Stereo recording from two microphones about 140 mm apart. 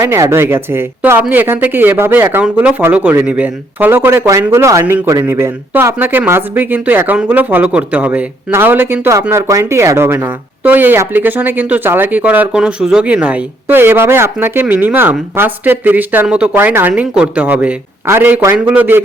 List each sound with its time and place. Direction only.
0.0 s speech: 20° right (ahead or behind)